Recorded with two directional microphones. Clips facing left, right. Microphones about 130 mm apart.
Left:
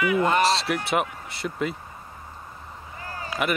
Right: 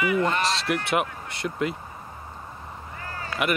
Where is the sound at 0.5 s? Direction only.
Centre (ahead or behind).